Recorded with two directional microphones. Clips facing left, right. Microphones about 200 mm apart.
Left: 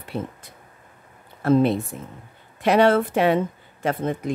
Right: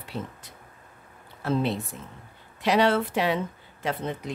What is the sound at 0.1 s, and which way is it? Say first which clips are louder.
Speech: left 5 dB; 50° left (ahead or behind).